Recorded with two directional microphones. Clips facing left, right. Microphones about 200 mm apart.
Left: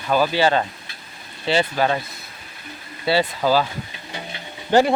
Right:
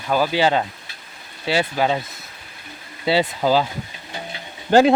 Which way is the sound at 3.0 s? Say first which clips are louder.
Right 1 dB; 20° right (ahead or behind).